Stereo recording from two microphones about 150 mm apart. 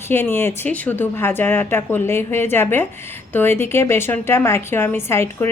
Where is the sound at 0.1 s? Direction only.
15° left (ahead or behind).